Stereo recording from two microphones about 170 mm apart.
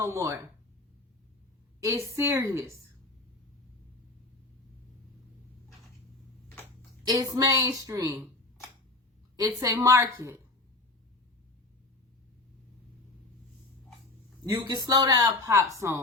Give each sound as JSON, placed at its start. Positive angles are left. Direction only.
{"t": 0.0, "sound": "a woman's voice", "side_deg": -15}
{"t": 1.8, "sound": "a woman's voice", "side_deg": -15}
{"t": 7.0, "sound": "a woman's voice", "side_deg": -25}
{"t": 9.3, "sound": "a woman's voice", "side_deg": -20}
{"t": 14.4, "sound": "a man's voice", "side_deg": -20}